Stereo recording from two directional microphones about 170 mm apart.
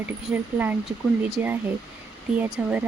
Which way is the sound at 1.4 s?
10° right (ahead or behind).